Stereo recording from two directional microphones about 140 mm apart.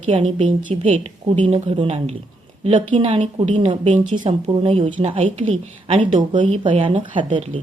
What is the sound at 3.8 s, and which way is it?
Speech, 55° right (ahead or behind).